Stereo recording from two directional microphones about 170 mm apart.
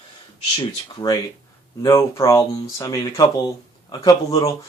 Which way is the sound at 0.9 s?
25° left (ahead or behind).